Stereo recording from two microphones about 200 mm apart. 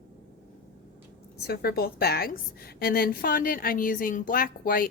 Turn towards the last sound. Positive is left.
turn(degrees=45)  # may be behind; listen again after turning